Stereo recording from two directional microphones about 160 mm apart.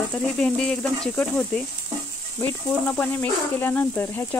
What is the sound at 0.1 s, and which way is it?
Sizzle, 5° left (ahead or behind).